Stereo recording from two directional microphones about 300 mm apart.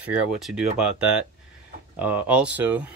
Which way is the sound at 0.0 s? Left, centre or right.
Centre.